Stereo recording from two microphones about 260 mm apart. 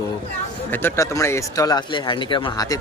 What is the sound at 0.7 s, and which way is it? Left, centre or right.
Speech, centre.